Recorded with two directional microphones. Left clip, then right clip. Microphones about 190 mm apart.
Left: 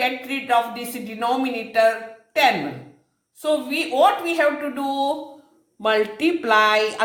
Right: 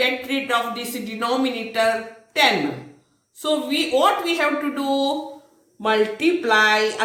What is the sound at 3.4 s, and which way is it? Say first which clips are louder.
A woman's voice: even; 55° left (ahead or behind).